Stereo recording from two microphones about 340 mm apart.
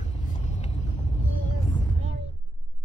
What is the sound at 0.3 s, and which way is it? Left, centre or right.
Vehicle, centre.